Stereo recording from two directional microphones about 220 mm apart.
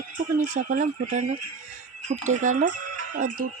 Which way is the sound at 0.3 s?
35° right (ahead or behind).